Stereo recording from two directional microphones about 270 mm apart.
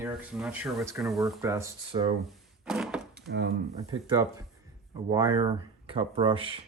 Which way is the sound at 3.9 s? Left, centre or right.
Centre.